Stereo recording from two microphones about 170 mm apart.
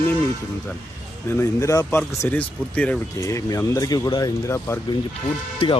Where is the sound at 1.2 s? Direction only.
15° left (ahead or behind).